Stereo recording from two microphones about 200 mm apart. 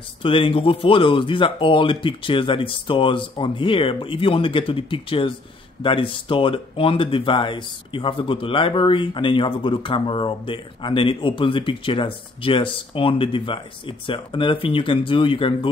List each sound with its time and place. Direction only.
0.2 s speech: 25° left (ahead or behind)